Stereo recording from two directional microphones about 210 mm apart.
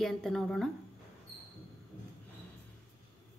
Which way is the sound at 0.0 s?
Centre (ahead or behind).